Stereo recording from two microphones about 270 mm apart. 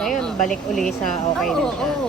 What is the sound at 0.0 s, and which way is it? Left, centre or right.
Speech, centre.